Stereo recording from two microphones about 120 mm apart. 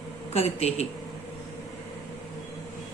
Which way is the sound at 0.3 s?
60° left (ahead or behind).